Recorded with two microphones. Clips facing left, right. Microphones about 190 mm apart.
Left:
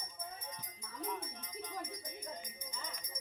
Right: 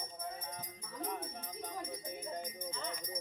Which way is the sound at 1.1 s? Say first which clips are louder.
Even; 45° right (ahead or behind).